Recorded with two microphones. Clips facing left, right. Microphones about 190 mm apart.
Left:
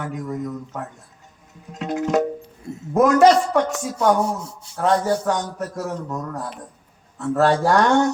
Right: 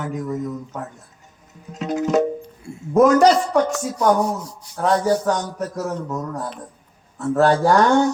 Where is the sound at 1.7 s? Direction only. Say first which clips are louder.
Right 2 dB; centre (ahead or behind).